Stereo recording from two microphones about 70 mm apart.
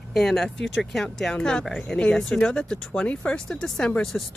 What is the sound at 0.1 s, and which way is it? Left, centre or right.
Speech, centre.